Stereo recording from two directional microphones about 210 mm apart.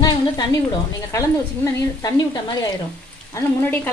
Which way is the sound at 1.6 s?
15° left (ahead or behind).